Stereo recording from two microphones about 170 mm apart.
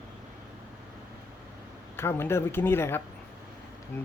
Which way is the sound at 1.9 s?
15° left (ahead or behind).